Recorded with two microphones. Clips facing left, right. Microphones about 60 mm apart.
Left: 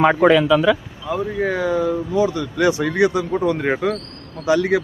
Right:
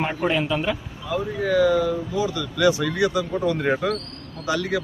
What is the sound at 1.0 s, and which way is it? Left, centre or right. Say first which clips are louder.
Speech: left 3 dB; left.